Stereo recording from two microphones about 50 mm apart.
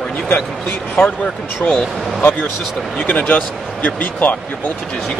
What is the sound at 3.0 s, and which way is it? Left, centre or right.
Speech, left.